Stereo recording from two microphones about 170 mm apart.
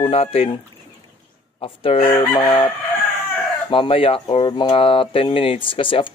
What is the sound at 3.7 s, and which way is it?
Speech, 30° left (ahead or behind).